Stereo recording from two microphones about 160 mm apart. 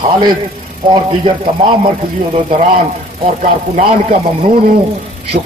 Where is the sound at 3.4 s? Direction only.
50° right (ahead or behind).